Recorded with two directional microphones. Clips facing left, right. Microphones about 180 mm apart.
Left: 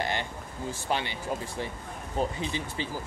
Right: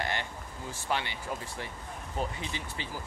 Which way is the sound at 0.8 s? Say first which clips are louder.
Left 2 dB; 20° left (ahead or behind).